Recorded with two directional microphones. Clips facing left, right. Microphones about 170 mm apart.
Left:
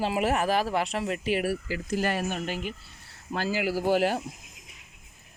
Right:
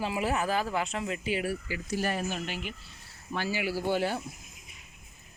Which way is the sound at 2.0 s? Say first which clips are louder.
Left 2 dB; 65° left (ahead or behind).